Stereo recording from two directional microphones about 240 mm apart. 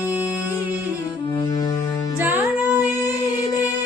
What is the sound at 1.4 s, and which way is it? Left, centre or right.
Music, centre.